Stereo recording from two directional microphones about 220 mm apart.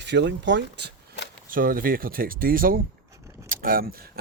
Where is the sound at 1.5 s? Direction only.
40° right (ahead or behind).